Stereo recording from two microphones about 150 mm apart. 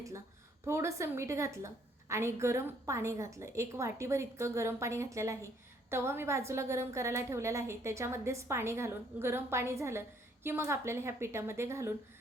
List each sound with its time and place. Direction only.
0.6 s a woman's voice: 20° right (ahead or behind)